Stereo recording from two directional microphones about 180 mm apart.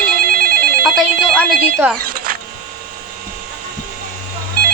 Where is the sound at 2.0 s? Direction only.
55° right (ahead or behind).